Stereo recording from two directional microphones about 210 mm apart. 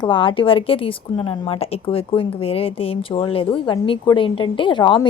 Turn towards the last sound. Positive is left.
turn(degrees=25)  # may be behind; listen again after turning